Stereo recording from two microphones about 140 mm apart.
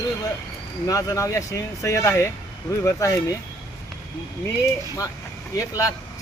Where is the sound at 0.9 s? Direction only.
25° left (ahead or behind).